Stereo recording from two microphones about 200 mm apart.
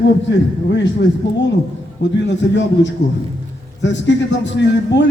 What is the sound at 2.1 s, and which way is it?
A man's voice, 60° left (ahead or behind).